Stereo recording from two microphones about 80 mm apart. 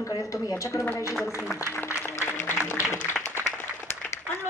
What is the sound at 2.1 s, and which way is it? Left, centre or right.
Music, left.